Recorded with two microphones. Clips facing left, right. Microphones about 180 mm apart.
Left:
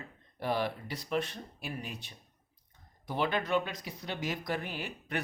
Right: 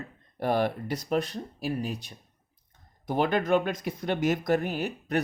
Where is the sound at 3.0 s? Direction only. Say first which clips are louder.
Right 6 dB; 45° right (ahead or behind).